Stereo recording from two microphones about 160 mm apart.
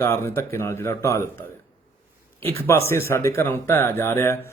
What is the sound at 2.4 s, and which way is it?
Speech, 15° left (ahead or behind).